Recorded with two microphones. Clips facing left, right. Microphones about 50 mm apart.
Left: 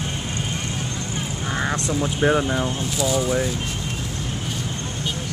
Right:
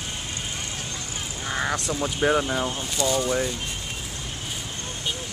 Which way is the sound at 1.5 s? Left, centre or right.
Centre.